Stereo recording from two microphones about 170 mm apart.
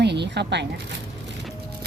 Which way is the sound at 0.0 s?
85° right.